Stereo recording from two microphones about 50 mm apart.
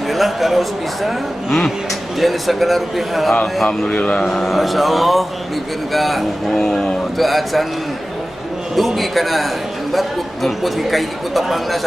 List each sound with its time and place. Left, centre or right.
0.1 s speech: centre
3.9 s a man's voice: left
4.2 s speech: centre
8.7 s speech: centre